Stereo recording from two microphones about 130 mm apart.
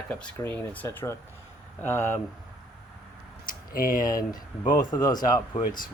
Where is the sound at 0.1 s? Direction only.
10° left (ahead or behind).